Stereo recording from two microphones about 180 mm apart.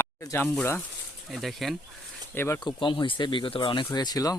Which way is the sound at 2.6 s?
25° left (ahead or behind).